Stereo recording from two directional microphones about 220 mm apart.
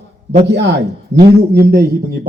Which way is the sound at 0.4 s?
50° right (ahead or behind).